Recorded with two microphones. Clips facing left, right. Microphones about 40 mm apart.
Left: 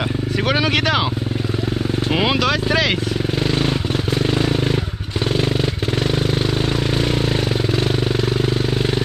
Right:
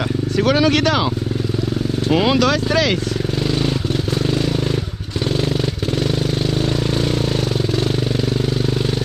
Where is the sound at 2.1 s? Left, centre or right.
Centre.